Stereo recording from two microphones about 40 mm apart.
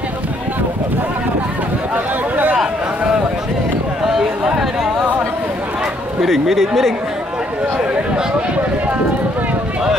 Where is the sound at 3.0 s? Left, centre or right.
Right.